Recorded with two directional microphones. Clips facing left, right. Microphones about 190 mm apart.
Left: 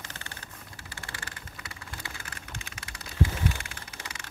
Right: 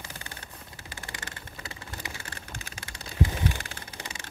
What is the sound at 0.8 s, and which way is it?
Vehicle, 20° right (ahead or behind).